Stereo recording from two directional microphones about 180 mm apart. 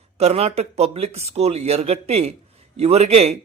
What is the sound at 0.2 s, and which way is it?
Speech, 35° right (ahead or behind).